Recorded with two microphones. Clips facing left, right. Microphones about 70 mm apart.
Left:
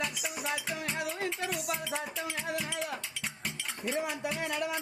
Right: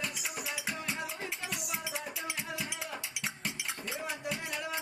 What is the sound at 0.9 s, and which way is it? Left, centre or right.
Music, left.